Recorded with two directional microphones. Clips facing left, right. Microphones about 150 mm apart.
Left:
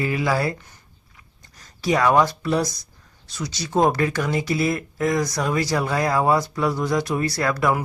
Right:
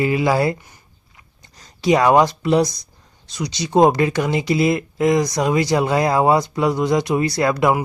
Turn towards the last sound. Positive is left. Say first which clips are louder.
# right 4 dB
turn(degrees=-20)  # may be behind; listen again after turning